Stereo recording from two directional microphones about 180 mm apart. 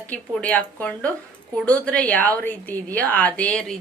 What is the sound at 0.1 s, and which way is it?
A woman's voice, 10° left (ahead or behind).